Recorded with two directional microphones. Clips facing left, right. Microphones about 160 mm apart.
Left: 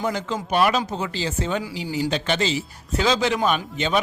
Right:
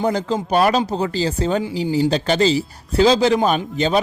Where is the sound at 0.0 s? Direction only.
35° right (ahead or behind).